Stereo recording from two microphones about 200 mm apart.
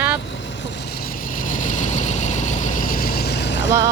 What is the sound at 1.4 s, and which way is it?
Vehicle, 40° left (ahead or behind).